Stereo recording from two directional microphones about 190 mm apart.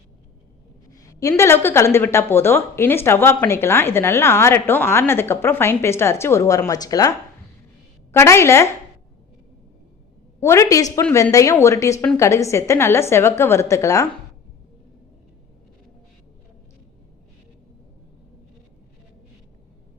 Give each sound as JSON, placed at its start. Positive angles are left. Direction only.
{"t": 0.9, "sound": "a woman's voice", "side_deg": 15}
{"t": 10.4, "sound": "a woman's voice", "side_deg": 15}